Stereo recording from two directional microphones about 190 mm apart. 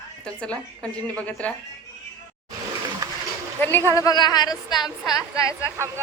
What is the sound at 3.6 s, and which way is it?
A woman's voice, 10° left (ahead or behind).